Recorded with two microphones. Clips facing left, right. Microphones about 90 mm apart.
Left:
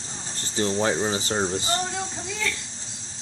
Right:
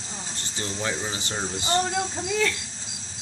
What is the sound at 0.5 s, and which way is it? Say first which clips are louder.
Speech: left 7 dB; 30° left (ahead or behind).